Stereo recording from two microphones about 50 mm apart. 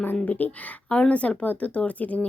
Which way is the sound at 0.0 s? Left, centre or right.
Left.